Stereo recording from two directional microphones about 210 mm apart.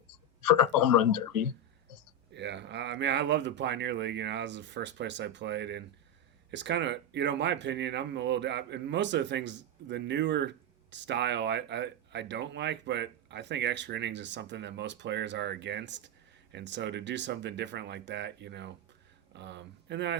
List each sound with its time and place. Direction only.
2.3 s speech: 55° right (ahead or behind)